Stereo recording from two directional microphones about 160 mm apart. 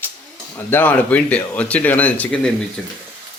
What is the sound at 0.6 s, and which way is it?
Speech, 10° left (ahead or behind).